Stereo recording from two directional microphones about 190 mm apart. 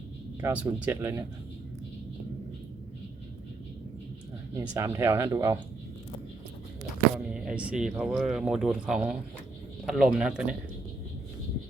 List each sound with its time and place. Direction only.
0.4 s speech: 10° right (ahead or behind)
4.5 s speech: 15° right (ahead or behind)
7.3 s speech: 5° right (ahead or behind)